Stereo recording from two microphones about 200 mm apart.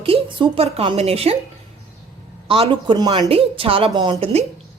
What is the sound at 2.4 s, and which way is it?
Speech, 25° right (ahead or behind).